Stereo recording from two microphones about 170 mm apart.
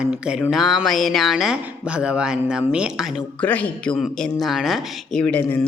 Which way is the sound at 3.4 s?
10° left (ahead or behind).